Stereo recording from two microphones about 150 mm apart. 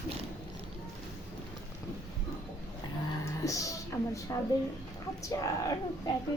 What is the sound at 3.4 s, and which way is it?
Music, 20° left (ahead or behind).